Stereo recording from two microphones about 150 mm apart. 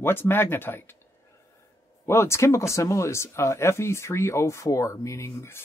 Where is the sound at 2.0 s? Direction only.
15° left (ahead or behind).